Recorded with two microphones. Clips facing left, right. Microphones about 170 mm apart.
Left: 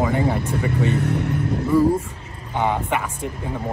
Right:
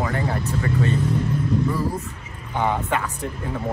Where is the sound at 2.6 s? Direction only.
15° left (ahead or behind).